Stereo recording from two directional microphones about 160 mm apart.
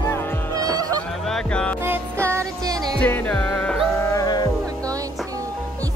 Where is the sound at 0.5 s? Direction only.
25° right (ahead or behind).